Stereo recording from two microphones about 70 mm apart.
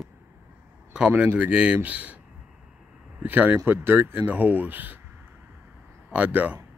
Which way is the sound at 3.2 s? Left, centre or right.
Right.